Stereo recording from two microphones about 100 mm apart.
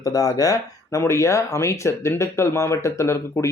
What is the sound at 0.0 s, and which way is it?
Speech, 35° left (ahead or behind).